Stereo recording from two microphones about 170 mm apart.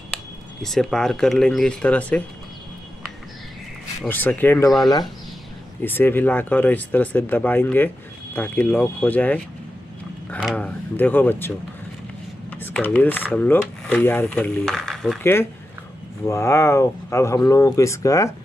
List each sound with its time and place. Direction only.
0.1 s speech: centre (ahead or behind)
4.1 s speech: 10° left (ahead or behind)
5.8 s speech: 10° left (ahead or behind)
16.3 s speech: 15° left (ahead or behind)